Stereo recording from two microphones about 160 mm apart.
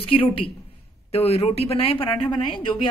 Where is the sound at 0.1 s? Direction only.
35° left (ahead or behind).